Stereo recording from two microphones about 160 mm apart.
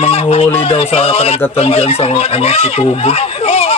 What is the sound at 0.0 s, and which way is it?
Speech, 40° left (ahead or behind).